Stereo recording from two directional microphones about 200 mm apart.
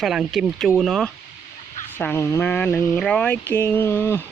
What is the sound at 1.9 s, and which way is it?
Speech, 10° left (ahead or behind).